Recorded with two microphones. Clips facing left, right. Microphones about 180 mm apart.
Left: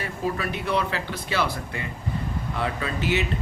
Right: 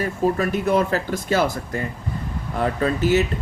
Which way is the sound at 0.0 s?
45° right (ahead or behind).